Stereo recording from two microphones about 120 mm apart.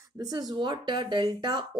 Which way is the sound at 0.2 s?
35° right (ahead or behind).